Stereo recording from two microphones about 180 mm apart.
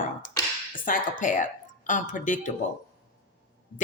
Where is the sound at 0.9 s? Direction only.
45° left (ahead or behind).